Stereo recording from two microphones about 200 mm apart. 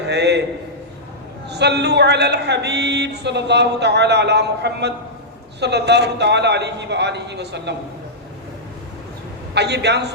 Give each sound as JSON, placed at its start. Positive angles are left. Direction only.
{"t": 0.1, "sound": "a sound", "side_deg": -55}
{"t": 1.5, "sound": "speech", "side_deg": -55}
{"t": 9.6, "sound": "speech", "side_deg": -55}